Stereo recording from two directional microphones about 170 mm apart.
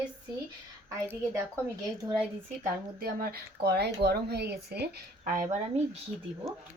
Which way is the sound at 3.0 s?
60° right (ahead or behind).